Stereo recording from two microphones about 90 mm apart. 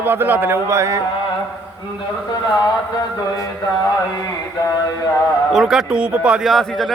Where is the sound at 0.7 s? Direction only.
35° right (ahead or behind).